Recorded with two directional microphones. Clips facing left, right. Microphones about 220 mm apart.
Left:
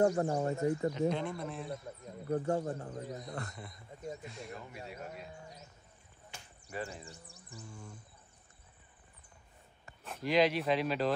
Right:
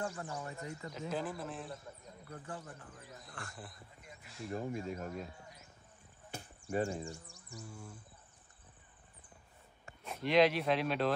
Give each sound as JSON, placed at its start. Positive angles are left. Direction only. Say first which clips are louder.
{"t": 0.0, "sound": "speech", "louder": "left 12 dB", "side_deg": 40}
{"t": 1.1, "sound": "speech", "louder": "left 2 dB", "side_deg": -5}
{"t": 2.2, "sound": "speech", "louder": "left 15 dB", "side_deg": 45}
{"t": 3.5, "sound": "speech", "louder": "left 2 dB", "side_deg": 0}
{"t": 4.6, "sound": "speech", "louder": "right 7 dB", "side_deg": -45}
{"t": 6.7, "sound": "speech", "louder": "right 7 dB", "side_deg": -45}
{"t": 7.6, "sound": "a sound", "louder": "even", "side_deg": -5}
{"t": 10.0, "sound": "speech", "louder": "right 1 dB", "side_deg": 0}